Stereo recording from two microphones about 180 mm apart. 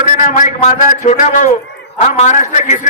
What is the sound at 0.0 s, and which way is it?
A man's voice, 45° left (ahead or behind).